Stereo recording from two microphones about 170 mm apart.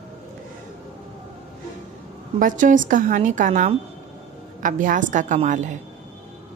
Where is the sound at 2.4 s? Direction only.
50° right (ahead or behind).